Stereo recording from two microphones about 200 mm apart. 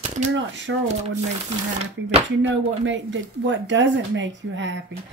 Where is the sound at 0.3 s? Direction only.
65° right (ahead or behind).